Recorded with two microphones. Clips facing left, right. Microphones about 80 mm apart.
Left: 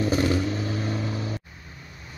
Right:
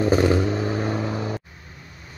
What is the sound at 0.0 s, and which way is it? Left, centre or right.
Vehicle, right.